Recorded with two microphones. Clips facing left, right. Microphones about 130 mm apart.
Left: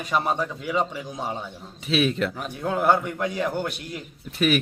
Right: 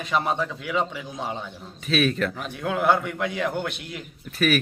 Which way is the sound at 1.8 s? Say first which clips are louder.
Even; 20° left (ahead or behind).